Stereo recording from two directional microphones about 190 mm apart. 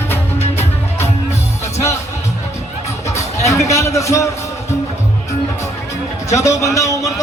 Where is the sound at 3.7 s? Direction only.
15° left (ahead or behind).